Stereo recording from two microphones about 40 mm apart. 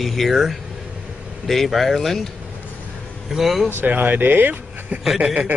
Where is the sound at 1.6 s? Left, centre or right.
Centre.